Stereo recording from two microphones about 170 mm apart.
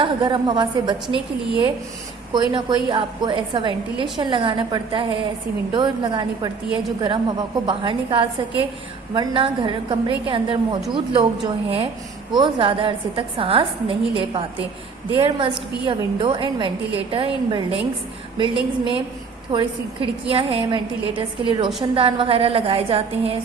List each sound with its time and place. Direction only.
0.0 s a woman's voice: 30° right (ahead or behind)
19.5 s a woman's voice: 30° right (ahead or behind)